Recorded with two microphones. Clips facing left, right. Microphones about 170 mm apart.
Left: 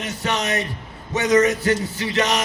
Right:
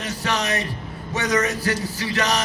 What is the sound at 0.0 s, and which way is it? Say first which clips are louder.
A man's voice: left 1 dB; 25° left (ahead or behind).